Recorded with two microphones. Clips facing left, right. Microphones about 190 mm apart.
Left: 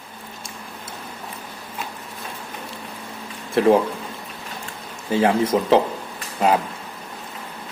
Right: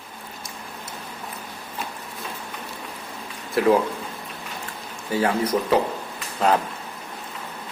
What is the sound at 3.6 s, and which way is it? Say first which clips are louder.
Speech: left 3 dB; 25° left (ahead or behind).